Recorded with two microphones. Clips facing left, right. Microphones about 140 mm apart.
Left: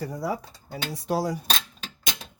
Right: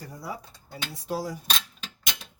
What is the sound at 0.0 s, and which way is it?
Speech, 75° left (ahead or behind).